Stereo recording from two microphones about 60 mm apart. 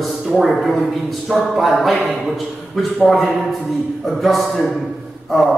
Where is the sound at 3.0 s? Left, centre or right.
Centre.